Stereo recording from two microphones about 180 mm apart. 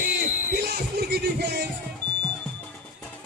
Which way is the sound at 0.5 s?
65° right (ahead or behind).